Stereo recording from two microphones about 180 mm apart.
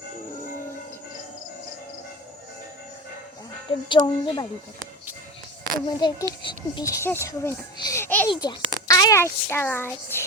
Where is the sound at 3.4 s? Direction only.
25° left (ahead or behind).